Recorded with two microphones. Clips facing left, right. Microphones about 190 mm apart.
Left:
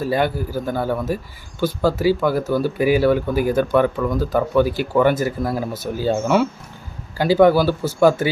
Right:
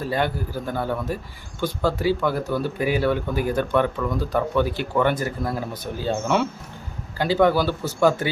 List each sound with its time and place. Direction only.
0.1 s a man's voice: 10° left (ahead or behind)